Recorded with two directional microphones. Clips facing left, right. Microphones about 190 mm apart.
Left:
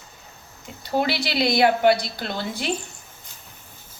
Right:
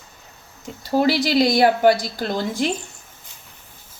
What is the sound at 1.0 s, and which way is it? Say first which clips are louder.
A woman's voice: right 6 dB; 45° right (ahead or behind).